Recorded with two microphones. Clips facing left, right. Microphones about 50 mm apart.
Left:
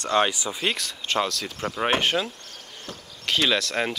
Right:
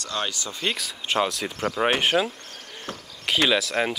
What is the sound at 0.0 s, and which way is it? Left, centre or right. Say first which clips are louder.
Speech: left 8 dB; left.